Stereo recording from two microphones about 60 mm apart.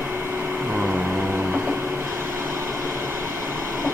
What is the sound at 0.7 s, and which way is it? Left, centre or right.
Vehicle, centre.